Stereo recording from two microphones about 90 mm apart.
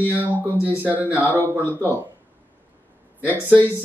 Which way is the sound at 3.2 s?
15° right (ahead or behind).